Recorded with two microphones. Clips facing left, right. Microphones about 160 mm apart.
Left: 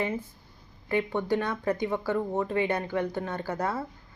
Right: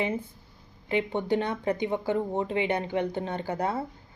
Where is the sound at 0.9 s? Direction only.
20° right (ahead or behind).